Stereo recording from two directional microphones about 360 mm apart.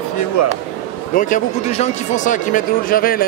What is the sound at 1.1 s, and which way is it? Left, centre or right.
Speech, left.